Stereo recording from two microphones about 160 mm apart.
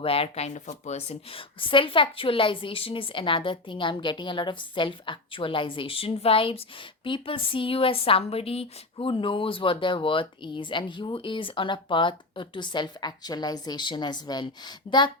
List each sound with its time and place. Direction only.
0.0 s a woman's voice: 35° left (ahead or behind)